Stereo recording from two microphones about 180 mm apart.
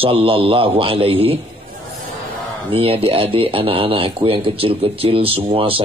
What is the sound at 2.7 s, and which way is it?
Speech, 30° right (ahead or behind).